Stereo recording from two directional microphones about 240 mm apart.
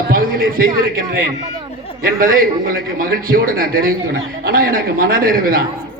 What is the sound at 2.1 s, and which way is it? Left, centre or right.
A man's voice, right.